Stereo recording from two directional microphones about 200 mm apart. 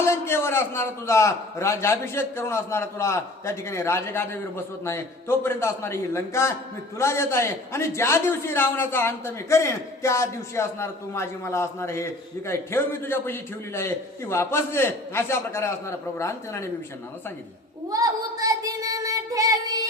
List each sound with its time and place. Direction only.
0.0 s a man's voice: 10° left (ahead or behind)
17.8 s child singing: 15° right (ahead or behind)